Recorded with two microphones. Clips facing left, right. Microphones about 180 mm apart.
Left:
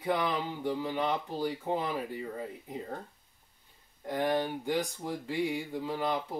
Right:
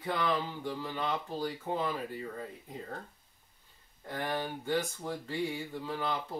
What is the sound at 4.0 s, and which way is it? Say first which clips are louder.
Speech: left 6 dB; 15° left (ahead or behind).